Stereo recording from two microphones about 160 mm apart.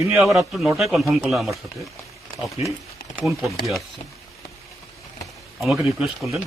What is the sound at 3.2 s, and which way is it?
Speech, centre (ahead or behind).